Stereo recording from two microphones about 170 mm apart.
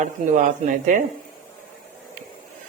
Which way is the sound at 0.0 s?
50° right (ahead or behind).